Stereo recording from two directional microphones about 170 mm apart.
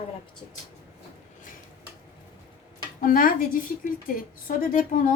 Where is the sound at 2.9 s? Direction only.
55° left (ahead or behind).